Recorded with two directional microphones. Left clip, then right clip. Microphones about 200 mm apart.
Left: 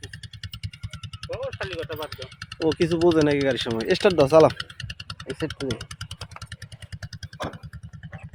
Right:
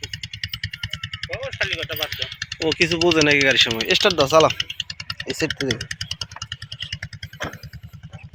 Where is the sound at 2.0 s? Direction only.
60° left (ahead or behind).